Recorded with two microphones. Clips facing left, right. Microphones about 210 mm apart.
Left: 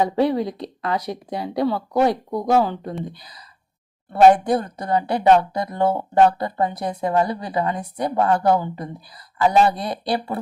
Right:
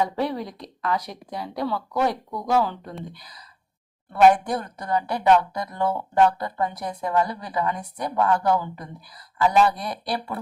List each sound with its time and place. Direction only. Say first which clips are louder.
0.0 s a woman's voice: left 6 dB; 25° left (ahead or behind)
4.1 s a woman's voice: left 4 dB; 30° left (ahead or behind)